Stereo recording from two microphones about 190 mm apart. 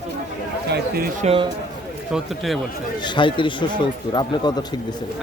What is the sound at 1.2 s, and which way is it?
Speech, 30° right (ahead or behind).